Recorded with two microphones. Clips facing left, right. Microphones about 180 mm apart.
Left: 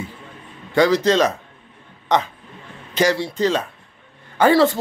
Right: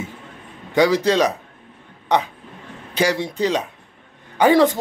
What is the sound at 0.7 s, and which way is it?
Speech, 10° right (ahead or behind).